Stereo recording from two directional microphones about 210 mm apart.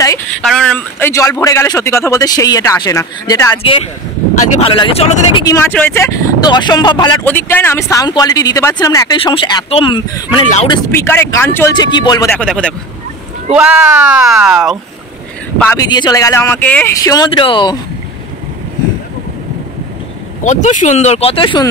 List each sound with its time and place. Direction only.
0.4 s a man's voice: 5° left (ahead or behind)
4.4 s speech: 25° left (ahead or behind)
5.4 s speech: 15° left (ahead or behind)
7.2 s a man's voice: 10° left (ahead or behind)
10.9 s a man's voice: 10° left (ahead or behind)
12.4 s speech: 5° left (ahead or behind)
15.6 s a man's voice: 15° left (ahead or behind)
20.4 s speech: 35° left (ahead or behind)